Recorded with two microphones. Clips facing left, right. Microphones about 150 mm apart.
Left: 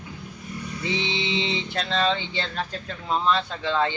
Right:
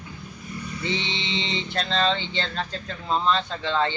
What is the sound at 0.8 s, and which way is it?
Music, 10° left (ahead or behind).